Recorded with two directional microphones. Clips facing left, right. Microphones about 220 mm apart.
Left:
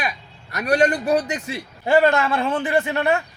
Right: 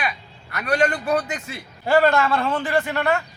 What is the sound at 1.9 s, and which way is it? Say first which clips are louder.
A man's voice: left 1 dB; 20° left (ahead or behind).